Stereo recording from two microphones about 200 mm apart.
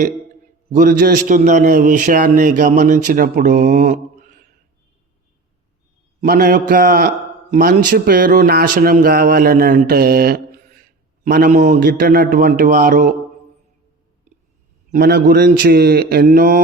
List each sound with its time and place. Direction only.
0.7 s speech: 45° right (ahead or behind)
6.2 s speech: 45° right (ahead or behind)
14.9 s speech: 50° right (ahead or behind)